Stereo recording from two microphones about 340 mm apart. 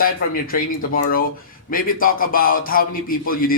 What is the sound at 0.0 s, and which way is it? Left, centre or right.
A man's voice, left.